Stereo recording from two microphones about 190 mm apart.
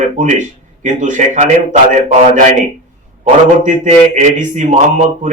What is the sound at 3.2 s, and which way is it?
Speech, 40° right (ahead or behind).